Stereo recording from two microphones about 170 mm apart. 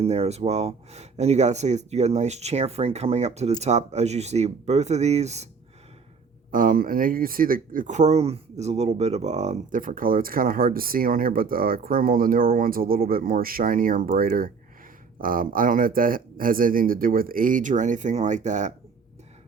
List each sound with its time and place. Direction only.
0.0 s speech: 40° right (ahead or behind)
6.5 s speech: 55° right (ahead or behind)